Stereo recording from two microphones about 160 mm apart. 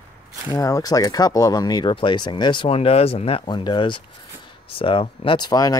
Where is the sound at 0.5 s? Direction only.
20° left (ahead or behind).